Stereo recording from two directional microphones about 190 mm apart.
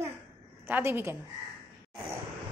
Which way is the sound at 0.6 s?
10° right (ahead or behind).